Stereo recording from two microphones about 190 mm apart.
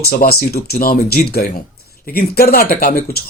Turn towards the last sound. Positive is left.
turn(degrees=50)  # may be behind; listen again after turning